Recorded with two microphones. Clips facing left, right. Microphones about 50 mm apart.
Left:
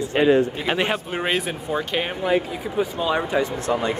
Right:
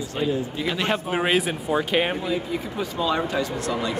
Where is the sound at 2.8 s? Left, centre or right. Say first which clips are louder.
Left 3 dB; centre.